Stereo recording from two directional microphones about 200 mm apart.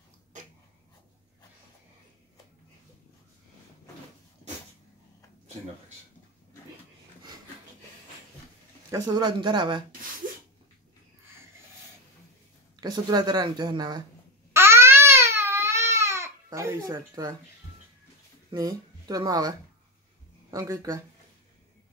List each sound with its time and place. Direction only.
8.9 s speech: 20° right (ahead or behind)
12.8 s speech: 20° right (ahead or behind)
14.5 s babbling: 10° right (ahead or behind)
16.9 s speech: 20° right (ahead or behind)
18.5 s speech: 20° right (ahead or behind)
20.5 s speech: 15° right (ahead or behind)